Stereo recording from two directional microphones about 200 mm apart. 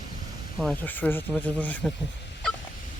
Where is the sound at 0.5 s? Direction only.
5° left (ahead or behind).